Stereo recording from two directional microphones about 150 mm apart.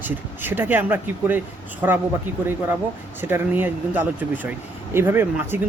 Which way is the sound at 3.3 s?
15° right (ahead or behind).